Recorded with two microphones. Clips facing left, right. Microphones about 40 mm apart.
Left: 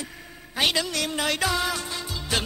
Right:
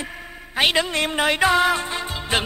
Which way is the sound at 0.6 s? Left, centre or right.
Right.